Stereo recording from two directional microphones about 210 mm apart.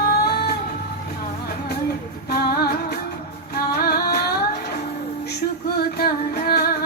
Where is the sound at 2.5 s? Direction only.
50° left (ahead or behind).